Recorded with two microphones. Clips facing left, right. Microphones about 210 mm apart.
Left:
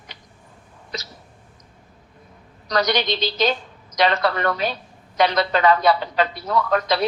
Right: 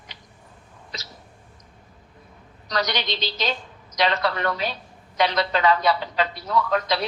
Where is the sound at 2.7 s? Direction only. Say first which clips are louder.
Left 5 dB; 50° left (ahead or behind).